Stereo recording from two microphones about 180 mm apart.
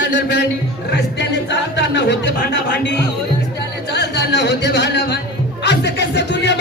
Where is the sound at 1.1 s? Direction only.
75° left (ahead or behind).